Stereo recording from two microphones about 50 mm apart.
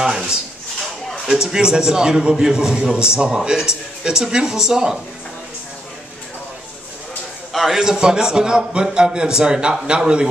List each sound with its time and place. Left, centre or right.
0.0 s a man's voice: centre
7.5 s a man's voice: centre
7.8 s a man's voice: centre